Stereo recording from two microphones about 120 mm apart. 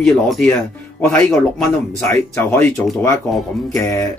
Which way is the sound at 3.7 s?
25° left (ahead or behind).